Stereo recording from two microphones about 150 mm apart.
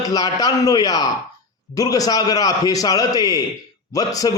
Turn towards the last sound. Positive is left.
turn(degrees=25)  # may be behind; listen again after turning